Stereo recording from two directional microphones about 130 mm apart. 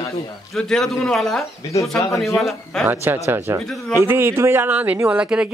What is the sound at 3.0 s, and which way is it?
A man's voice, 15° right (ahead or behind).